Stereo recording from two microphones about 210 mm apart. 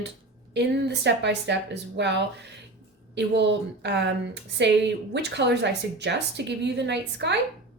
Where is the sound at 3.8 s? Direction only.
55° right (ahead or behind).